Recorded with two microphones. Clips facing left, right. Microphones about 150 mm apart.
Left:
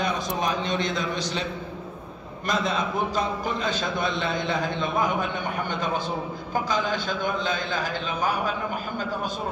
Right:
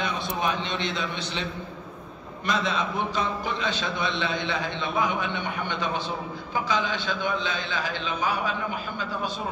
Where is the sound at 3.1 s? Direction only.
45° left (ahead or behind).